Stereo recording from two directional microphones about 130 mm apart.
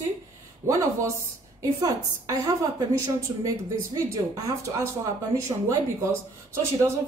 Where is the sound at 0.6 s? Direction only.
20° right (ahead or behind).